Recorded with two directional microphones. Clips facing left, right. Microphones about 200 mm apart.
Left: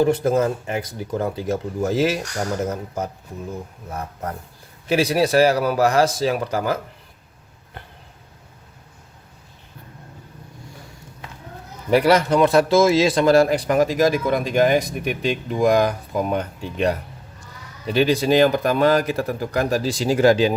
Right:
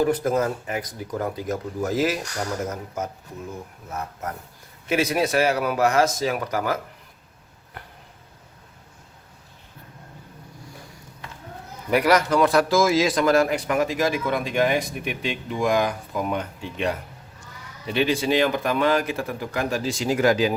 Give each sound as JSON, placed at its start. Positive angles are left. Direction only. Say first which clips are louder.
{"t": 0.0, "sound": "speech", "louder": "left 3 dB", "side_deg": 25}
{"t": 11.9, "sound": "speech", "louder": "left 3 dB", "side_deg": 30}